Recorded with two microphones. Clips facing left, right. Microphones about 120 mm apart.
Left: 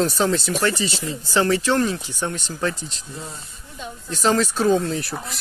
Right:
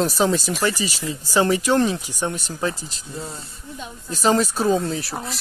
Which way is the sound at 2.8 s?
40° right (ahead or behind).